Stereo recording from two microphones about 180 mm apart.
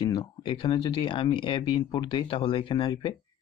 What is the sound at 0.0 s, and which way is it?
Speech, 25° left (ahead or behind).